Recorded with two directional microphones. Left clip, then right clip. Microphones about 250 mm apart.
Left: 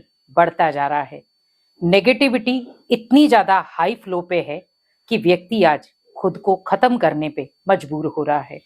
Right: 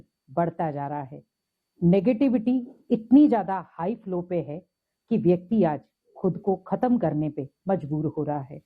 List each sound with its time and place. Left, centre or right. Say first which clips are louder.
0.3 s a woman's voice: left 11 dB; centre
6.4 s speech: left 10 dB; left
6.7 s a woman's voice: left 10 dB; centre
7.9 s speech: left 6 dB; left
8.2 s a woman's voice: left 10 dB; centre